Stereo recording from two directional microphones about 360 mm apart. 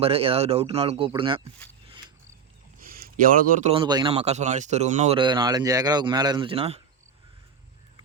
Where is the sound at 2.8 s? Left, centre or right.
Right.